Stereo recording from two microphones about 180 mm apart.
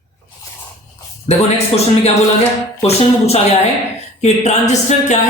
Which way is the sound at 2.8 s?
35° left (ahead or behind).